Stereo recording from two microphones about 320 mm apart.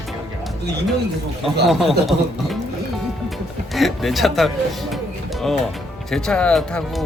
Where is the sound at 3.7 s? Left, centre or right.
Centre.